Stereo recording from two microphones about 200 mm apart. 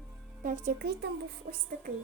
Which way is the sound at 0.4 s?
40° right (ahead or behind).